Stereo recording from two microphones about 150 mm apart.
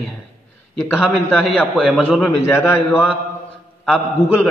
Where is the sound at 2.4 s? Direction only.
15° left (ahead or behind).